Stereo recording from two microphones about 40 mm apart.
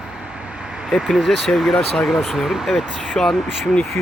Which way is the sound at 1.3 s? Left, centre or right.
Centre.